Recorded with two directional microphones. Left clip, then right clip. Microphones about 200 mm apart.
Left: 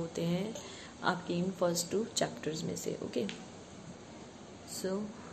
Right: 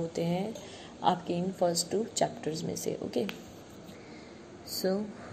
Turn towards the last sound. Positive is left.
turn(degrees=-20)  # may be behind; listen again after turning